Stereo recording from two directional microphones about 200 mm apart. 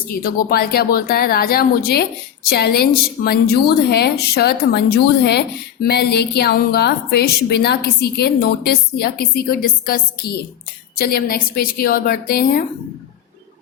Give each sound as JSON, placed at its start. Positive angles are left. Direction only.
{"t": 0.1, "sound": "a woman's voice", "side_deg": 50}